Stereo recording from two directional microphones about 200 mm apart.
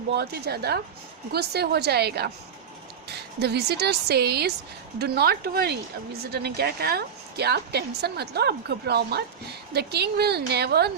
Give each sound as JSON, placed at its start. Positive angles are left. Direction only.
{"t": 0.1, "sound": "a woman's voice", "side_deg": -55}